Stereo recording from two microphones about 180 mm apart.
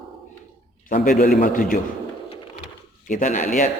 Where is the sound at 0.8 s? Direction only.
45° left (ahead or behind).